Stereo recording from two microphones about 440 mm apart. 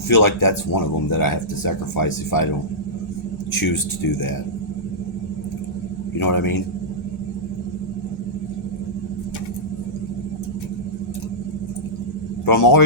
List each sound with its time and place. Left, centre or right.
0.1 s speech: left
3.6 s speech: left
6.1 s speech: left
12.5 s speech: left